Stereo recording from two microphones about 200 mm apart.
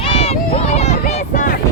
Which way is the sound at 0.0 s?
30° left (ahead or behind).